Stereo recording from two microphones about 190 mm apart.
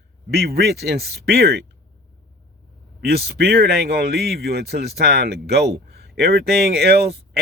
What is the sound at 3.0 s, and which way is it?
A man's voice, 55° right (ahead or behind).